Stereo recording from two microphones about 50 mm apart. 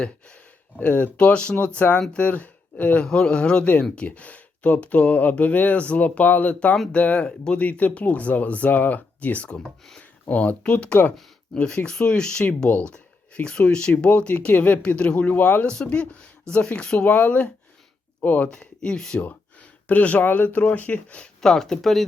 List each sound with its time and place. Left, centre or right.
0.8 s speech: left
1.1 s speech: left
3.0 s speech: centre
7.3 s speech: centre
7.6 s speech: left
12.7 s speech: left
13.3 s speech: left
18.4 s speech: centre
19.2 s speech: left
21.4 s speech: centre